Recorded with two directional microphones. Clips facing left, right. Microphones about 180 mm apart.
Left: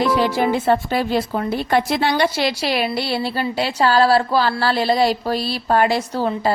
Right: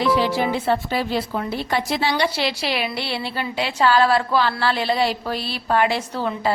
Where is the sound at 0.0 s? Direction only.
45° left (ahead or behind).